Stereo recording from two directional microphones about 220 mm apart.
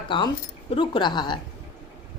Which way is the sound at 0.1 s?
20° left (ahead or behind).